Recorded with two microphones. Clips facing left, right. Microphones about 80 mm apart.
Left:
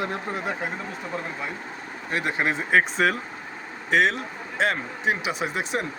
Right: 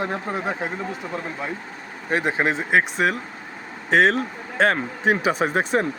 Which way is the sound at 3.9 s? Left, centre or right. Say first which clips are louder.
Right 4 dB; right.